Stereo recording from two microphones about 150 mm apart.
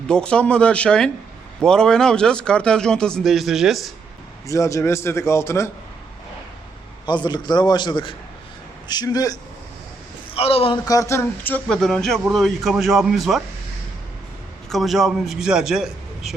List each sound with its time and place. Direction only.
0.1 s speech: 5° left (ahead or behind)
4.4 s a man's voice: 20° left (ahead or behind)
7.0 s a man's voice: 30° left (ahead or behind)
10.3 s a man's voice: 40° left (ahead or behind)
10.8 s speech: 20° left (ahead or behind); by 13.4 s centre (ahead or behind)
14.7 s speech: centre (ahead or behind)